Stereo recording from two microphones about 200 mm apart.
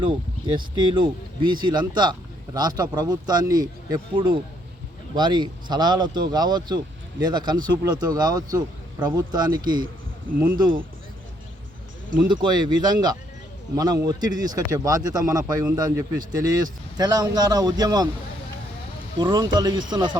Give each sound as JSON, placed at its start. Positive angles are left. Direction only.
{"t": 0.4, "sound": "speech", "side_deg": -25}
{"t": 12.3, "sound": "speech", "side_deg": -20}
{"t": 19.2, "sound": "speech", "side_deg": -20}